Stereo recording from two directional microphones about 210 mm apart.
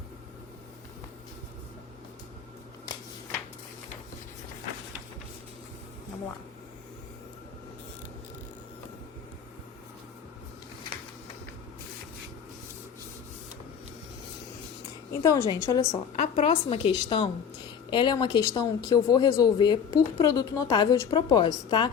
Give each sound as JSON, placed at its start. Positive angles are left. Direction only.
{"t": 15.2, "sound": "a woman's voice", "side_deg": 15}
{"t": 16.1, "sound": "speech", "side_deg": 35}